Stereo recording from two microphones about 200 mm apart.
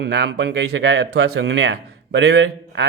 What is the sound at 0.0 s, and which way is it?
Speech, 60° right (ahead or behind).